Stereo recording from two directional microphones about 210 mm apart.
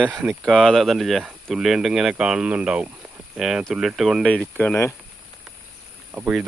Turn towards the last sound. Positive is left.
turn(degrees=-5)  # may be behind; listen again after turning